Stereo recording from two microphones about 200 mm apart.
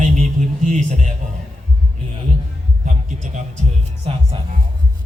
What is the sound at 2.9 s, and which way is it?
Music, 40° right (ahead or behind).